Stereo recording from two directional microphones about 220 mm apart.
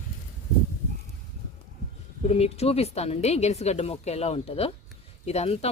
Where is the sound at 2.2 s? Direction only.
30° left (ahead or behind).